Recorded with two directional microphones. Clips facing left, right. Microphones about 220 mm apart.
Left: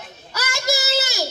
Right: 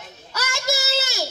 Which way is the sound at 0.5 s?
25° right (ahead or behind).